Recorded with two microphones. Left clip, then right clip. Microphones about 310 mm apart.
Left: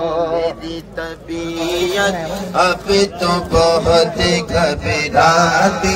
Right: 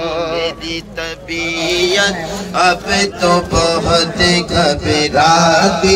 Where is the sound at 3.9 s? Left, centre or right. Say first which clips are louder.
Even; centre.